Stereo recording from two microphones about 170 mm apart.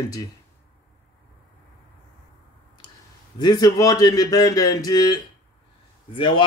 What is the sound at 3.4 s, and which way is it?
A man's voice, 25° left (ahead or behind).